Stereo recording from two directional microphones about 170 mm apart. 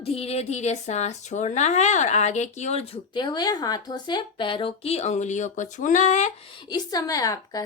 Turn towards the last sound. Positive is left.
turn(degrees=20)  # may be behind; listen again after turning